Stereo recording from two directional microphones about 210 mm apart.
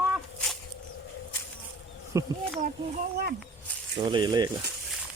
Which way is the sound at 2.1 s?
15° right (ahead or behind).